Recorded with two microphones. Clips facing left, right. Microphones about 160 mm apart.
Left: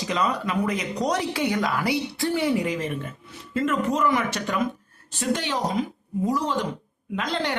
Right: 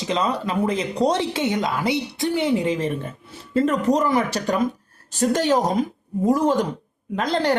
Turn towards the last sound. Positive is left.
turn(degrees=-40)  # may be behind; listen again after turning